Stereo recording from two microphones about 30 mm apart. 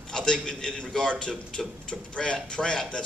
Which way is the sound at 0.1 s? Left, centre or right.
Left.